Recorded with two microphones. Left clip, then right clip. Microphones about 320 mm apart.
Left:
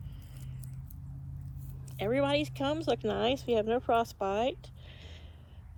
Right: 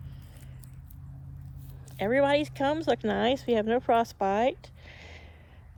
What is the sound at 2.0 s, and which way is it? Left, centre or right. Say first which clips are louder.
A woman's voice: right 5 dB; centre.